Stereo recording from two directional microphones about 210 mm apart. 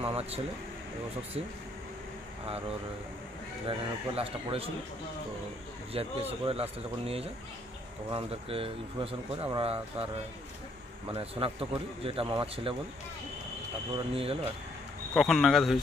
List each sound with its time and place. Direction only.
0.0 s a sound: 30° right (ahead or behind)
3.6 s speech: 25° right (ahead or behind)
5.9 s speech: 25° right (ahead or behind)
11.1 s speech: 25° right (ahead or behind)
13.9 s speech: 25° right (ahead or behind)
15.1 s speech: centre (ahead or behind)